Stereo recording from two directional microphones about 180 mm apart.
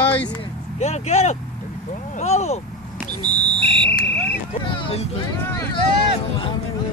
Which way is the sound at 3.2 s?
30° right (ahead or behind).